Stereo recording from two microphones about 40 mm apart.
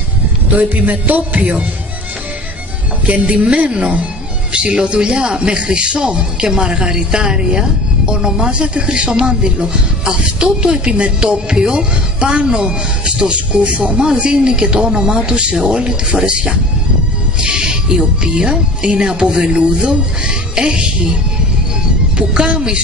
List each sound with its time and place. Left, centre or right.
0.6 s speech: right
3.1 s speech: right
22.1 s speech: right